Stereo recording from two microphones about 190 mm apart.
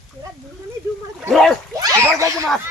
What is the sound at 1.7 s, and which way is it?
Speech, 20° right (ahead or behind).